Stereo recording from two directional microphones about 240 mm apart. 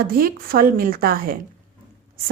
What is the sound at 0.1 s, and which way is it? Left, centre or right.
A woman's voice, right.